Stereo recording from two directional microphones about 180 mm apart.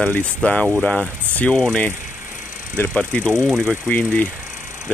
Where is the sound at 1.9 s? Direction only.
45° left (ahead or behind).